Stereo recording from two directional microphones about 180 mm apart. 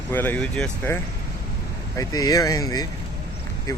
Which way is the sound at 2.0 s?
20° left (ahead or behind).